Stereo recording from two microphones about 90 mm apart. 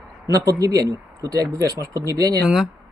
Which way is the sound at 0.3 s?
40° right (ahead or behind).